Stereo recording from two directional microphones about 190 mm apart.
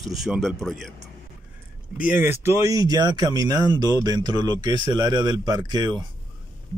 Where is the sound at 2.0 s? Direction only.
10° right (ahead or behind).